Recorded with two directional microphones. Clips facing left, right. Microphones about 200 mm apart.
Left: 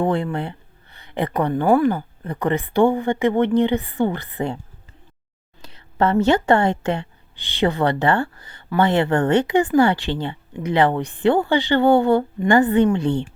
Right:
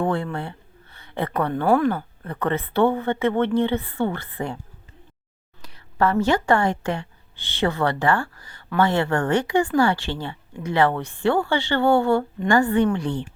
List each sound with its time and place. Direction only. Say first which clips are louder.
0.0 s speech: left 3 dB; 15° left (ahead or behind)
5.6 s a woman's voice: left 2 dB; 25° left (ahead or behind)